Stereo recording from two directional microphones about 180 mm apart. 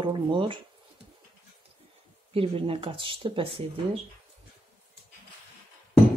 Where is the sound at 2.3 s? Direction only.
30° right (ahead or behind).